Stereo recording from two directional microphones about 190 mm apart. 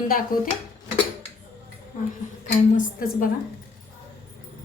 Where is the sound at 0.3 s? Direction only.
50° left (ahead or behind).